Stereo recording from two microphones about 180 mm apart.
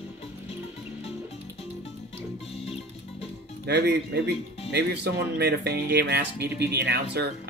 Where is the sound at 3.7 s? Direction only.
70° right (ahead or behind).